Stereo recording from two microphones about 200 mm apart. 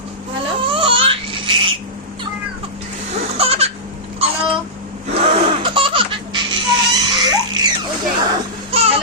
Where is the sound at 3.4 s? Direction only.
30° right (ahead or behind).